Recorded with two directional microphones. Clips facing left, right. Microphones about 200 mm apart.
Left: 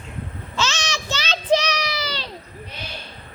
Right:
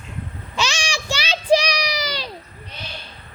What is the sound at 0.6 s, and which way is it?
Child singing, 15° right (ahead or behind).